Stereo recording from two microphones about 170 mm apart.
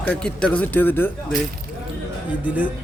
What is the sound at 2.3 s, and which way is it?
Speech, 10° right (ahead or behind).